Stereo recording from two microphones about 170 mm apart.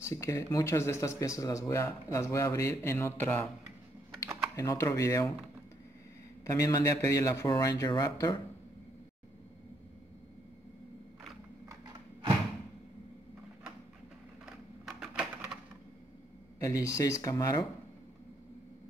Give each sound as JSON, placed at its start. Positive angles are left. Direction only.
{"t": 0.1, "sound": "speech", "side_deg": 15}
{"t": 4.6, "sound": "a man's voice", "side_deg": 15}
{"t": 6.4, "sound": "a man's voice", "side_deg": 20}
{"t": 14.4, "sound": "a sound", "side_deg": -5}
{"t": 16.5, "sound": "a man's voice", "side_deg": 20}